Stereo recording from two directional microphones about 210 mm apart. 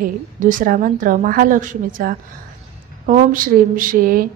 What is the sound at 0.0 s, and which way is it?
A woman's voice, 40° right (ahead or behind).